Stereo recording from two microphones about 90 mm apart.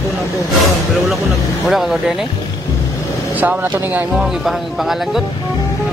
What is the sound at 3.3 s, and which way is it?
Speech, 20° right (ahead or behind).